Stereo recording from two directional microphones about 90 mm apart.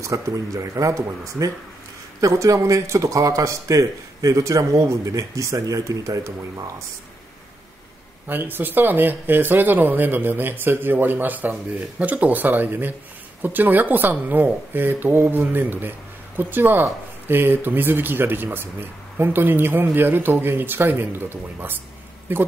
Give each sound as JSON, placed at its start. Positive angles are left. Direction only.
{"t": 0.0, "sound": "a man's voice", "side_deg": -35}
{"t": 8.3, "sound": "speech", "side_deg": -20}